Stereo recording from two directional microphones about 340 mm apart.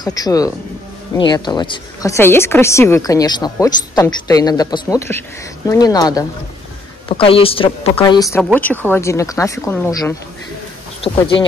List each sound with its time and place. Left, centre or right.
0.0 s a woman's voice: centre